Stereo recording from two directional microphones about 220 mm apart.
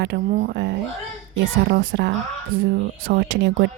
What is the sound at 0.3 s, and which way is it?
Speech, 35° right (ahead or behind).